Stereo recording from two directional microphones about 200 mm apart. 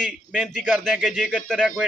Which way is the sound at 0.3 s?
Centre (ahead or behind).